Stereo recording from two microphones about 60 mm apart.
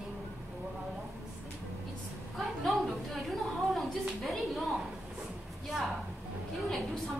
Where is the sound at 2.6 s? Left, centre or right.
Centre.